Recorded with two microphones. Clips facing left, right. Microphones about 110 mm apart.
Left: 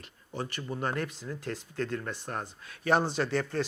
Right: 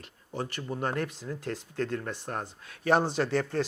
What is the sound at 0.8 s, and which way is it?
Speech, 45° right (ahead or behind).